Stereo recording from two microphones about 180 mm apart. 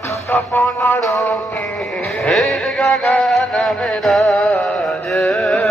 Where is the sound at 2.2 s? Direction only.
5° left (ahead or behind).